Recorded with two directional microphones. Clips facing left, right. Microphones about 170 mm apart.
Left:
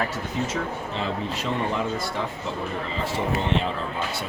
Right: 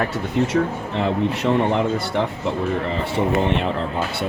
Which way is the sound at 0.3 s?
65° right (ahead or behind).